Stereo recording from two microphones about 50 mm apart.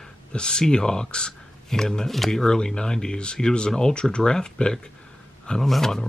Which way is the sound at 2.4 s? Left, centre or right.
Centre.